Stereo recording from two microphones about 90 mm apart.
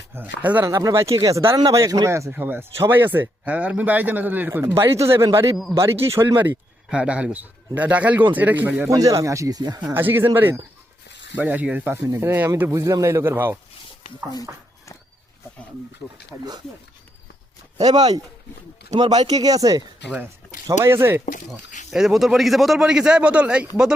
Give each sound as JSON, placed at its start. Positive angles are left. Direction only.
{"t": 0.1, "sound": "speech", "side_deg": -20}
{"t": 0.6, "sound": "speech", "side_deg": -40}
{"t": 2.3, "sound": "speech", "side_deg": -20}
{"t": 4.6, "sound": "speech", "side_deg": -35}
{"t": 6.9, "sound": "a man's voice", "side_deg": -10}
{"t": 8.9, "sound": "speech", "side_deg": -35}
{"t": 9.8, "sound": "a man's voice", "side_deg": -20}
{"t": 11.9, "sound": "speech", "side_deg": -30}
{"t": 12.7, "sound": "speech", "side_deg": -35}
{"t": 16.3, "sound": "speech", "side_deg": -20}
{"t": 17.7, "sound": "speech", "side_deg": -50}
{"t": 20.7, "sound": "speech", "side_deg": -30}
{"t": 21.8, "sound": "a man's voice", "side_deg": -5}